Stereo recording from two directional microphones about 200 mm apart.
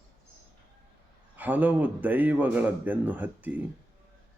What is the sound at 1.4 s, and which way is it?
A man's voice, 10° right (ahead or behind).